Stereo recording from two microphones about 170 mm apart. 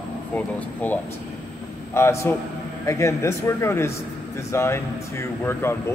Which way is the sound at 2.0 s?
15° left (ahead or behind).